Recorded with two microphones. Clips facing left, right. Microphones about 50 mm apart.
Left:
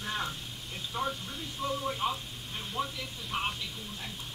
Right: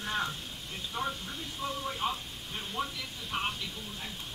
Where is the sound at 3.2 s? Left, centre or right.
Centre.